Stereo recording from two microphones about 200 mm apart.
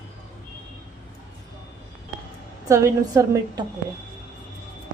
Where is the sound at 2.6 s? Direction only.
15° right (ahead or behind).